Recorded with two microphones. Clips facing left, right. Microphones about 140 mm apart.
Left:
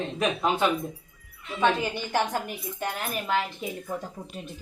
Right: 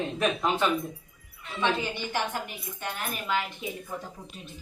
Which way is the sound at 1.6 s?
45° left (ahead or behind).